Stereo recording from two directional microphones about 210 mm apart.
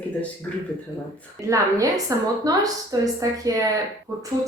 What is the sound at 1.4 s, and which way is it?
A woman's voice, 15° right (ahead or behind).